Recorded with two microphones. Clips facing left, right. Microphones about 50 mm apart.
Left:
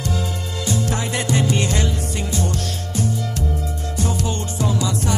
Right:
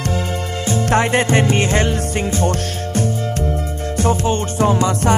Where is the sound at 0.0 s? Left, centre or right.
Right.